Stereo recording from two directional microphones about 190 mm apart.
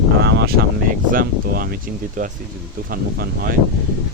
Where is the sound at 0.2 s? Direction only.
60° right (ahead or behind).